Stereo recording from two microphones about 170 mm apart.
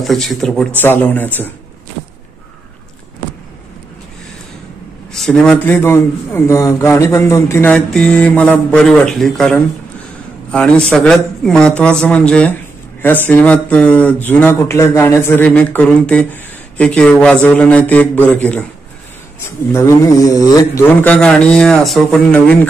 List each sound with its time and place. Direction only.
0.0 s a man's voice: centre (ahead or behind)
5.1 s a man's voice: 5° left (ahead or behind); by 20.8 s 20° left (ahead or behind)
21.0 s a man's voice: 5° left (ahead or behind)